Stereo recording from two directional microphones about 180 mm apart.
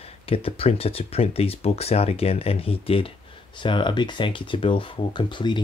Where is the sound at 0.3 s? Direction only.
35° left (ahead or behind).